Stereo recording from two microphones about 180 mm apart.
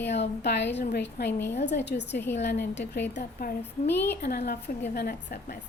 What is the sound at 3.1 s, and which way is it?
A woman's voice, 55° left (ahead or behind).